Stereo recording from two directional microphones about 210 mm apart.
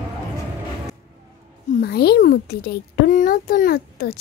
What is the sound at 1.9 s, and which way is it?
A child's voice, 50° left (ahead or behind).